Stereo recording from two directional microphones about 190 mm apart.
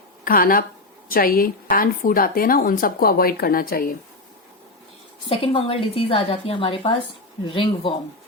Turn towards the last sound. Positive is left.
turn(degrees=25)  # may be behind; listen again after turning